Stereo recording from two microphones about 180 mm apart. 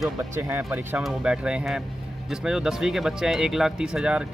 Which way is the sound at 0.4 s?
10° right (ahead or behind).